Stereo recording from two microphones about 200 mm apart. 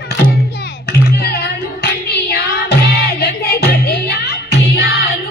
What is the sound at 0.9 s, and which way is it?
Music, 50° left (ahead or behind).